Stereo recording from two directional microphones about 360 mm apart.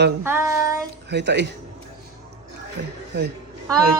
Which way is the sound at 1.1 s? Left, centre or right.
Right.